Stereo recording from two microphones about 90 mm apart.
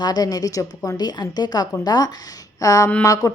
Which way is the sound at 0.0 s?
45° left (ahead or behind).